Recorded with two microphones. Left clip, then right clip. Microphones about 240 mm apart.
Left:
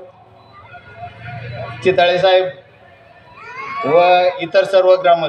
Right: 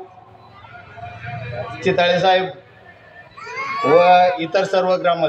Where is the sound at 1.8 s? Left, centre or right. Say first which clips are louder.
Left 3 dB; left.